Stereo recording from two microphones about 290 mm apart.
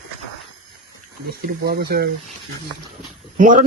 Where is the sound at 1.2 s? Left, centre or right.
Right.